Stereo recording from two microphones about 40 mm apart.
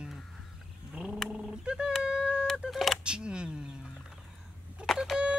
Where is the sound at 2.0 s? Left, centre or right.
Right.